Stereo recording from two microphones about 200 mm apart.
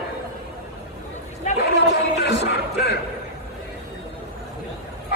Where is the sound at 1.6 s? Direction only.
55° left (ahead or behind).